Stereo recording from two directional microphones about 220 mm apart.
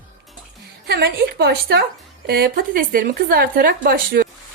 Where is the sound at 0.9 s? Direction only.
45° right (ahead or behind).